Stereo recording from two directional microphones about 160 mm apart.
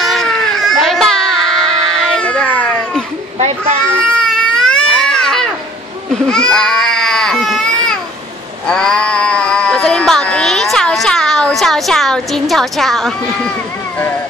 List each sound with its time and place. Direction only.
0.0 s baby cry: centre (ahead or behind)
3.3 s a child's voice: 40° right (ahead or behind)
4.0 s baby cry: 5° left (ahead or behind)
8.6 s a sound: 5° left (ahead or behind)